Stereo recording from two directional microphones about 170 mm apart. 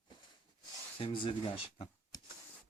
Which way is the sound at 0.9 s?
30° left (ahead or behind).